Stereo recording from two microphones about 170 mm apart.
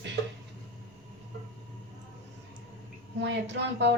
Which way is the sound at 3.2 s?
90° right.